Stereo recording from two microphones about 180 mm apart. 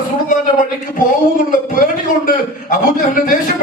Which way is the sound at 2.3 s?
50° left (ahead or behind).